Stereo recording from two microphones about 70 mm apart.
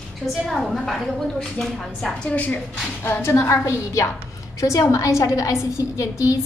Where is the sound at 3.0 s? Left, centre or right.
Left.